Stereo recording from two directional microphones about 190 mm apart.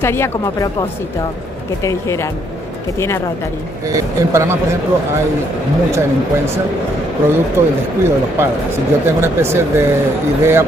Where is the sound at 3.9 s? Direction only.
15° right (ahead or behind).